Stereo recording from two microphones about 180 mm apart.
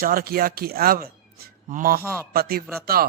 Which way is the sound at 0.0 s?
55° right (ahead or behind).